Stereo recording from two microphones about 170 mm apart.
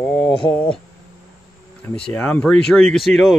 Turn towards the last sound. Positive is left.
turn(degrees=0)  # may be behind; listen again after turning